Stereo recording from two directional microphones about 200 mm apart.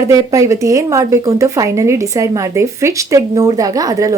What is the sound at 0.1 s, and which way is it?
A woman's voice, 15° right (ahead or behind).